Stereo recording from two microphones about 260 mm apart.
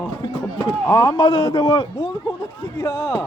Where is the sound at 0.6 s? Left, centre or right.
Centre.